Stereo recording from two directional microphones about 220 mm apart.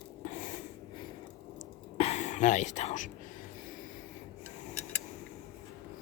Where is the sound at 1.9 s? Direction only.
30° left (ahead or behind).